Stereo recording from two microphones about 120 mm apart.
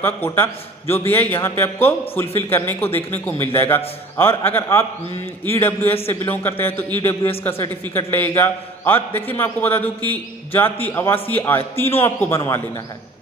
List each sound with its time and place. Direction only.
0.0 s a man's voice: 20° left (ahead or behind)